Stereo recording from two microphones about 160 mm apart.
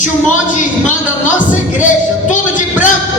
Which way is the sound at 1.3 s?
50° left (ahead or behind).